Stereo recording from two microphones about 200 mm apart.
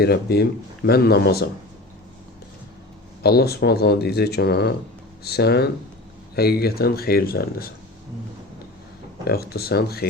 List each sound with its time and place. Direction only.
0.0 s speech: 55° left (ahead or behind)
3.2 s speech: 50° left (ahead or behind)
9.2 s speech: 50° left (ahead or behind)